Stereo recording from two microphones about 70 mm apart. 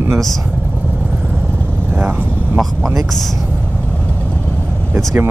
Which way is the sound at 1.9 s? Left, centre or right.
Right.